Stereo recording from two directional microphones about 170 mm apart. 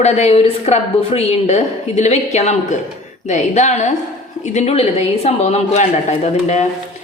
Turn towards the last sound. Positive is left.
turn(degrees=40)  # may be behind; listen again after turning